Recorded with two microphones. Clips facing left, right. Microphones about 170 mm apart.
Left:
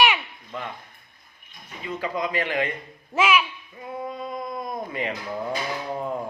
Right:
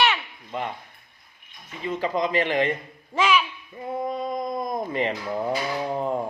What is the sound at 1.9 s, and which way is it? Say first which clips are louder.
Speech: right 3 dB; 25° right (ahead or behind).